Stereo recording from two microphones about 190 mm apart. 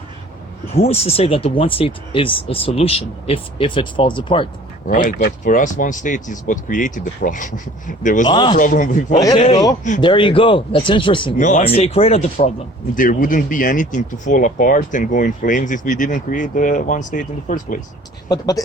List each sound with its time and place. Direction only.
0.7 s speech: 30° left (ahead or behind)
4.9 s speech: 45° left (ahead or behind)
8.3 s speech: 25° left (ahead or behind)
8.5 s speech: 45° left (ahead or behind)
9.1 s speech: 20° left (ahead or behind)
11.3 s speech: 40° left (ahead or behind)
13.0 s speech: 45° left (ahead or behind)
18.3 s speech: 20° left (ahead or behind)